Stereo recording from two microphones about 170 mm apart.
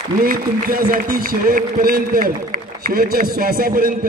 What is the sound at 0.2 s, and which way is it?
Speech, 60° right (ahead or behind).